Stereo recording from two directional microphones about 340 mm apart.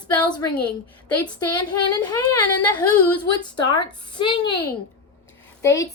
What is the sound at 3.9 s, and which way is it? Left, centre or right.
Speech, centre.